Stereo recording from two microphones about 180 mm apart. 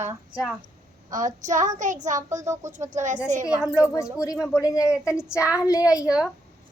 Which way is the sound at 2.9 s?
45° right (ahead or behind).